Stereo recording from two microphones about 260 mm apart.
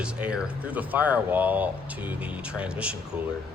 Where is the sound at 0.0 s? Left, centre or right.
Centre.